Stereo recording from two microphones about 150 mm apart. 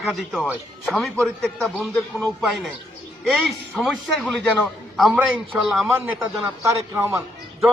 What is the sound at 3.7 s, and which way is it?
A man's voice, centre (ahead or behind).